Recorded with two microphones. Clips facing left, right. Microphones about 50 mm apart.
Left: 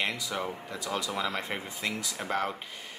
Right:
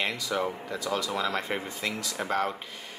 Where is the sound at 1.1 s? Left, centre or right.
Centre.